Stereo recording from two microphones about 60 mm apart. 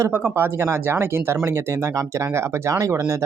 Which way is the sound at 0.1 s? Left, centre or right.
Right.